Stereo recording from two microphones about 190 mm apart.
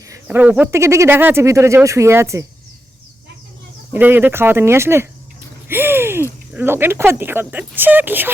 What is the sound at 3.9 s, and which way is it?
Speech, 10° right (ahead or behind).